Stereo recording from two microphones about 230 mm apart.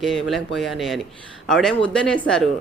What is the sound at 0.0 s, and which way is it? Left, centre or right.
Speech, centre.